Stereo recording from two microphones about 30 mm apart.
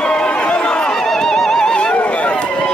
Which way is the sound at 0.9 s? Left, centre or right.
Centre.